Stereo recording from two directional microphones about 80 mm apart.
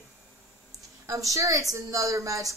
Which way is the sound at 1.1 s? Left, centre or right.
Right.